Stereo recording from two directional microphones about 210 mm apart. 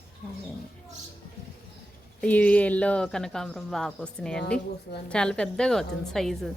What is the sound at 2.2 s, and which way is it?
Speech, 5° left (ahead or behind).